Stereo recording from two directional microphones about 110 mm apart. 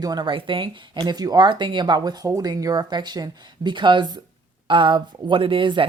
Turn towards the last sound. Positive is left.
turn(degrees=-50)  # may be behind; listen again after turning